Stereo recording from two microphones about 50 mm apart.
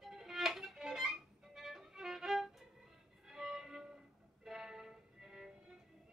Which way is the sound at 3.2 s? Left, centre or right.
Centre.